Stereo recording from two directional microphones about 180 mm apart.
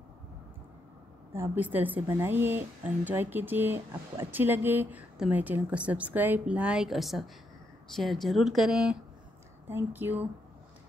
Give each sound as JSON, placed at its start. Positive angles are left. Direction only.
{"t": 1.3, "sound": "speech", "side_deg": -10}